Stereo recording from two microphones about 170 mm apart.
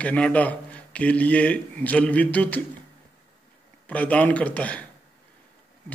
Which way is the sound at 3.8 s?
10° left (ahead or behind).